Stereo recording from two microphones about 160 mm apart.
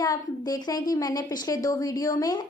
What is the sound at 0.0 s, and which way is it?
A woman's voice, 25° left (ahead or behind).